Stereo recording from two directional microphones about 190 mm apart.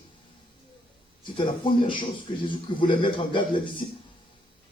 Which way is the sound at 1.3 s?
25° left (ahead or behind).